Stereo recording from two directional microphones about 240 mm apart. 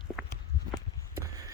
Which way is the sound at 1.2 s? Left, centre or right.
Centre.